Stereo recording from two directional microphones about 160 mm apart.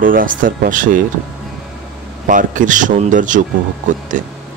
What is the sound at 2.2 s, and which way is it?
Speech, 55° right (ahead or behind).